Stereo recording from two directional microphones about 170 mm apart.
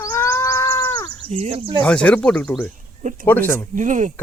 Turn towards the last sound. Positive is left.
turn(degrees=-45)  # may be behind; listen again after turning